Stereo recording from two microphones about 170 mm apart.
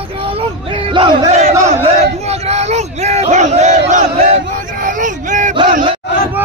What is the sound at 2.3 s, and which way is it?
Battle cry, 40° right (ahead or behind).